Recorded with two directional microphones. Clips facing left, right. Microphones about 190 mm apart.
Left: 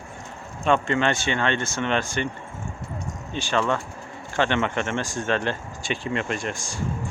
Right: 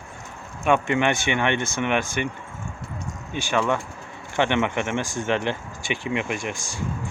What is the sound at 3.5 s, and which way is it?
Speech, 10° right (ahead or behind).